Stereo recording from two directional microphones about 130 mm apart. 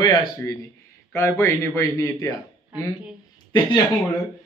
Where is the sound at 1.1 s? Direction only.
20° left (ahead or behind).